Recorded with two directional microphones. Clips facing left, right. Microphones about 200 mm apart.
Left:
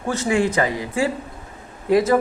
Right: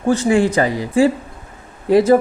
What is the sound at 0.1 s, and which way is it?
Speech, 30° right (ahead or behind).